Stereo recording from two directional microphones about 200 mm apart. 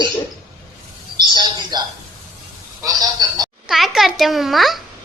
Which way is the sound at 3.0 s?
20° right (ahead or behind).